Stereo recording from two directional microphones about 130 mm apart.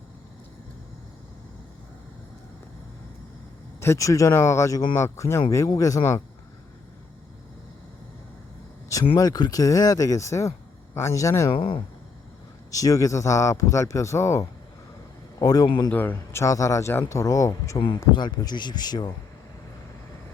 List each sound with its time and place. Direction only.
3.8 s speech: 20° left (ahead or behind)
9.1 s speech: 30° left (ahead or behind)
11.5 s speech: 45° left (ahead or behind)
12.7 s a man's voice: 25° left (ahead or behind)
15.9 s speech: 15° left (ahead or behind); by 19.1 s 30° left (ahead or behind)